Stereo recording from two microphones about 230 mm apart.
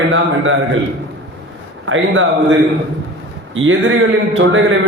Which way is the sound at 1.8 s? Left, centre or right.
Right.